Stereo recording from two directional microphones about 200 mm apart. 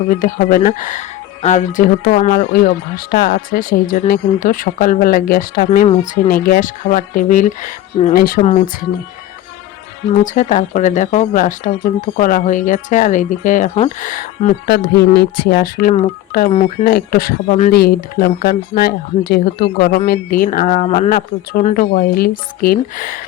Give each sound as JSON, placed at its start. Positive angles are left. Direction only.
{"t": 0.1, "sound": "speech", "side_deg": 40}
{"t": 10.2, "sound": "speech", "side_deg": 40}
{"t": 21.1, "sound": "speech", "side_deg": 50}